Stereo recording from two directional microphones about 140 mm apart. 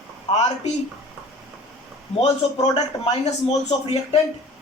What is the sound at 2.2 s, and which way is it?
Speech, 50° left (ahead or behind).